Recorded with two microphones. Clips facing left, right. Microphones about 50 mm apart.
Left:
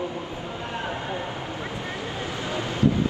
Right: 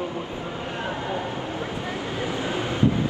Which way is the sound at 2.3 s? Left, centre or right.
Right.